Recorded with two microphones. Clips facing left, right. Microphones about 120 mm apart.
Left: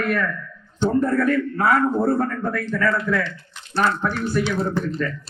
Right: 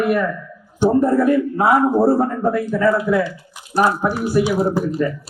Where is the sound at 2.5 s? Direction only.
10° right (ahead or behind).